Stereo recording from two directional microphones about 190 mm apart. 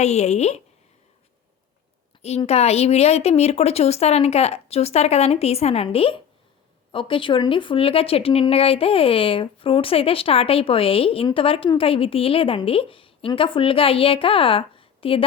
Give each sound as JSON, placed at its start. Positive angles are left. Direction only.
{"t": 0.0, "sound": "speech", "side_deg": 35}
{"t": 2.2, "sound": "speech", "side_deg": 35}